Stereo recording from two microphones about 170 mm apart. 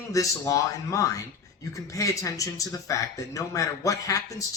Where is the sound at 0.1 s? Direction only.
20° left (ahead or behind).